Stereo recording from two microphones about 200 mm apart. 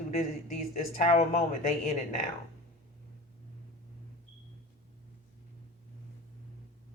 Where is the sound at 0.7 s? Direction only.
35° left (ahead or behind).